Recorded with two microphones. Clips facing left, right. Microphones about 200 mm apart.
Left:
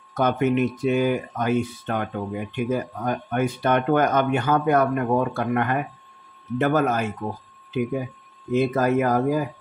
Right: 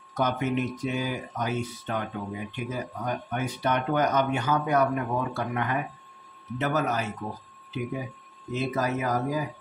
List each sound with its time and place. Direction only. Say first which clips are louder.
0.1 s speech: left 6 dB; 55° left (ahead or behind)
8.5 s speech: left 7 dB; 55° left (ahead or behind)